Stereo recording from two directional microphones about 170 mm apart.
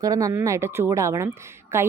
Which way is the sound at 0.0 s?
20° right (ahead or behind).